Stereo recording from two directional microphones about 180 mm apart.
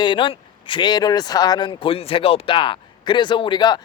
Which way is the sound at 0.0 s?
25° left (ahead or behind).